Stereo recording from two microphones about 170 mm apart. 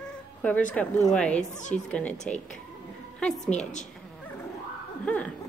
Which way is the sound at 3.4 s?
45° left (ahead or behind).